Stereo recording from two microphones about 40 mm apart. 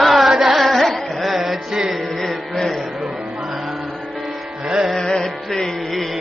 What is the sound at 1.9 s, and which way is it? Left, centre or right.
Music, centre.